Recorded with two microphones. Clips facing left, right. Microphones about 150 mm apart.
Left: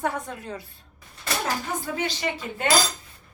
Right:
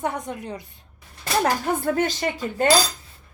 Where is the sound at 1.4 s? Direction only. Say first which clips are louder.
Right 8 dB; 55° right (ahead or behind).